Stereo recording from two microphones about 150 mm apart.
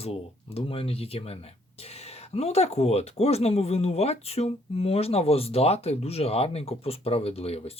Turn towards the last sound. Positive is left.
turn(degrees=45)  # may be behind; listen again after turning